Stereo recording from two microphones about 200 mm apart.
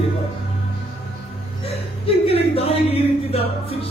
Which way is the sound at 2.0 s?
30° left (ahead or behind).